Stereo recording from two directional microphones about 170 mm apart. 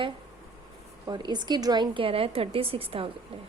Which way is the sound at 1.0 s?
25° right (ahead or behind).